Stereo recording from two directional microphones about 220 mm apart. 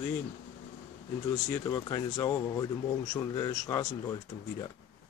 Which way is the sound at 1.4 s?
15° left (ahead or behind).